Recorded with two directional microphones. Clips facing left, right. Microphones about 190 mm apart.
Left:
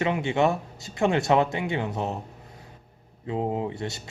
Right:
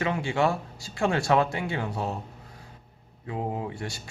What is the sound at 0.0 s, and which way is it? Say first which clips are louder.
Speech: left 2 dB; 20° left (ahead or behind).